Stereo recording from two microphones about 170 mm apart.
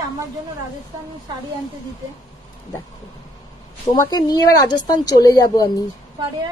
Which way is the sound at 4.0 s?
25° left (ahead or behind).